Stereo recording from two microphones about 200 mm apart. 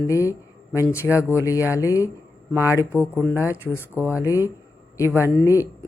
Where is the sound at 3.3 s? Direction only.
10° right (ahead or behind).